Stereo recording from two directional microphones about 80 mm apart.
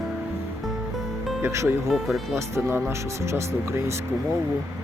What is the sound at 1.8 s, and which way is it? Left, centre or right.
Speech, centre.